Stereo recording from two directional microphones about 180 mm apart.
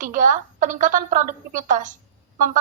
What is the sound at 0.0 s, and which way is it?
A woman's voice, 45° right (ahead or behind).